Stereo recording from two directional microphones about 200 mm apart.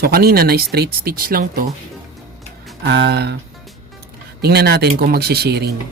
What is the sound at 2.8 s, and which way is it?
Speech, 55° right (ahead or behind).